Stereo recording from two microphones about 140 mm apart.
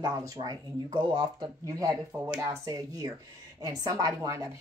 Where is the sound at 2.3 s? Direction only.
25° right (ahead or behind).